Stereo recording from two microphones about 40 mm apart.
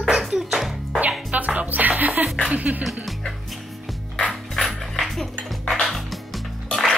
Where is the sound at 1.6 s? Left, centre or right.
Right.